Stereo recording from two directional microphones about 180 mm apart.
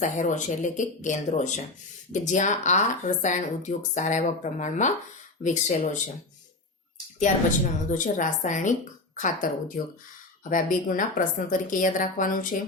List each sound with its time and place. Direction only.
0.0 s speech: 45° left (ahead or behind)
7.2 s speech: 45° left (ahead or behind)